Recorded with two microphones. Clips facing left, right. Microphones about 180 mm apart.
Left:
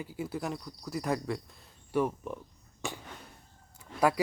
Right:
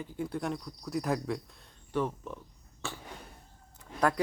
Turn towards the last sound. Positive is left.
turn(degrees=10)  # may be behind; listen again after turning